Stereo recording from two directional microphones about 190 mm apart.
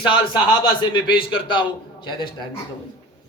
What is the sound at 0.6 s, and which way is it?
A man's voice, 25° left (ahead or behind).